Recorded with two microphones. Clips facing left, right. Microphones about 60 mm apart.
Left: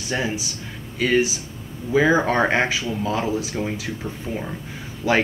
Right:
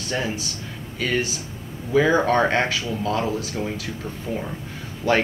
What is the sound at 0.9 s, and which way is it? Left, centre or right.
Speech, centre.